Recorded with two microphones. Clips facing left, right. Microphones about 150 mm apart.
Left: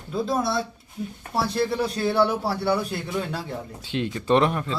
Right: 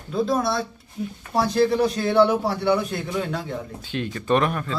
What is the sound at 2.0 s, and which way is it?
Speech, 5° left (ahead or behind).